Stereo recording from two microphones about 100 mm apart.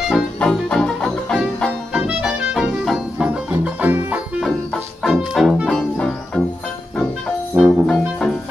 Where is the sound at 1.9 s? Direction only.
5° right (ahead or behind).